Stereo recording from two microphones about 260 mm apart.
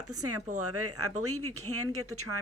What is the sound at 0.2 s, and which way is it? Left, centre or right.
Speech, right.